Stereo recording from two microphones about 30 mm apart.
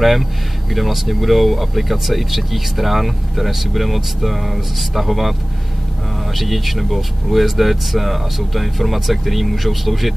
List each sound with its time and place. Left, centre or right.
0.0 s speech: centre
6.3 s speech: centre